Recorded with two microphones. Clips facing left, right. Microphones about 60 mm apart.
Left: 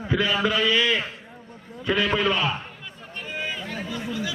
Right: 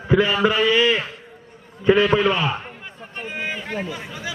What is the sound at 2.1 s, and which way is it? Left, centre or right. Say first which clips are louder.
Speech: right 4 dB; centre.